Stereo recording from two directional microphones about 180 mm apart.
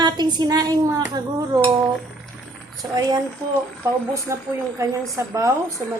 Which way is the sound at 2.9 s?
20° right (ahead or behind).